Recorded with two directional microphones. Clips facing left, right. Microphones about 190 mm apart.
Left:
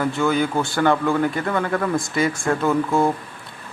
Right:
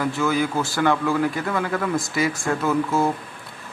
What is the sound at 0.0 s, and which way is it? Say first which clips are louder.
Speech: left 2 dB; centre (ahead or behind).